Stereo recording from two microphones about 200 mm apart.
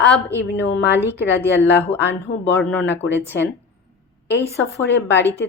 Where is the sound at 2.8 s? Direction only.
60° left (ahead or behind).